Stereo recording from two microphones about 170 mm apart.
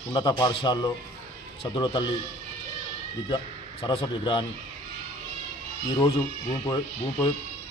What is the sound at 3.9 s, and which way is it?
Speech, 30° left (ahead or behind).